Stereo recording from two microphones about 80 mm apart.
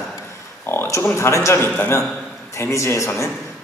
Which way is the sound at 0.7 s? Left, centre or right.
Left.